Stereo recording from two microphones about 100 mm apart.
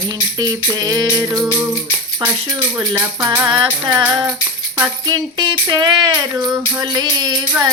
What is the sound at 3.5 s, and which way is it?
Music, 55° right (ahead or behind).